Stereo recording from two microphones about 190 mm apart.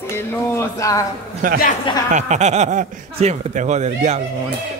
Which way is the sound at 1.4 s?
45° right (ahead or behind).